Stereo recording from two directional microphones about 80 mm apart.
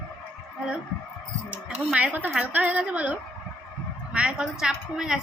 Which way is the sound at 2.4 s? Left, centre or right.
Centre.